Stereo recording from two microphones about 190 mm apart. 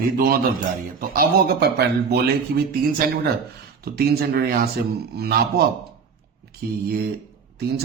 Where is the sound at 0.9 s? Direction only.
50° right (ahead or behind).